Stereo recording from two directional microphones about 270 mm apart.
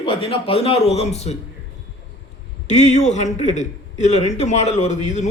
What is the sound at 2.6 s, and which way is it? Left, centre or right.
A man's voice, left.